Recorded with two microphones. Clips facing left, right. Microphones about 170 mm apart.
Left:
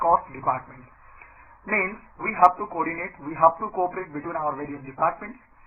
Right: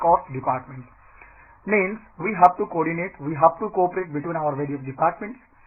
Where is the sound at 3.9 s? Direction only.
55° right (ahead or behind).